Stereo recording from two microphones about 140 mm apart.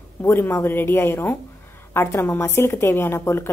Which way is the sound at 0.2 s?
15° left (ahead or behind).